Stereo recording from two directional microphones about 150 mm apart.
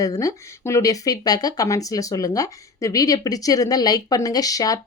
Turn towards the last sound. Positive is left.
turn(degrees=25)  # may be behind; listen again after turning